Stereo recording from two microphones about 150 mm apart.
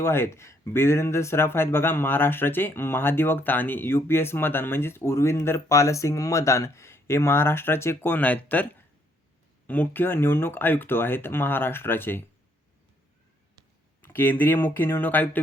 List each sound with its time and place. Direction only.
0.0 s speech: 15° left (ahead or behind)
14.0 s speech: 10° left (ahead or behind)